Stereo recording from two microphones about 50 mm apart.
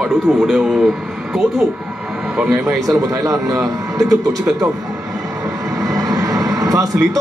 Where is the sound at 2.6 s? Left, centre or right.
Right.